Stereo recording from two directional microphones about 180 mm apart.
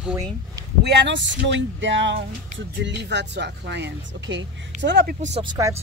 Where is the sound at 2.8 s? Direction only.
70° right (ahead or behind).